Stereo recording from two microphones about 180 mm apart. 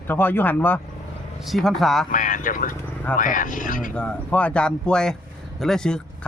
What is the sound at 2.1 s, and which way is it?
Speech, 45° left (ahead or behind).